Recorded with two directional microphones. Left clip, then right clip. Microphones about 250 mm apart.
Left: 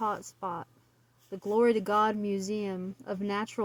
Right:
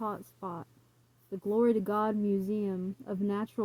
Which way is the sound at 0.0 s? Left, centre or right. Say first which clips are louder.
Left 5 dB; left.